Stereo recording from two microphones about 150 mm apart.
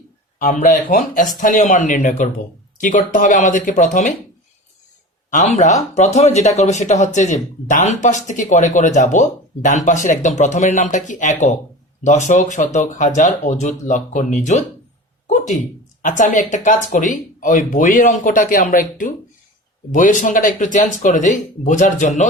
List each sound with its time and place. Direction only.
0.3 s speech: 60° left (ahead or behind)
5.3 s speech: 50° left (ahead or behind)
16.0 s speech: 60° left (ahead or behind)